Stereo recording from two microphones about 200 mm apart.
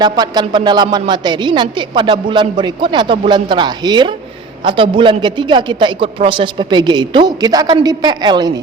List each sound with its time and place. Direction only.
0.0 s a woman's voice: 20° right (ahead or behind)